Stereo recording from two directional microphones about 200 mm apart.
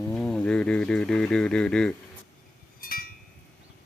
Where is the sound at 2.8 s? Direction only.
45° left (ahead or behind).